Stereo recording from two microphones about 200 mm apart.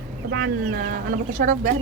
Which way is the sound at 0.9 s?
40° right (ahead or behind).